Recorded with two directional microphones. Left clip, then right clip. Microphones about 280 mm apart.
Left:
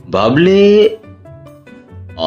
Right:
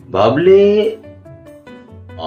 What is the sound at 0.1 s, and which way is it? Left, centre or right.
Speech, left.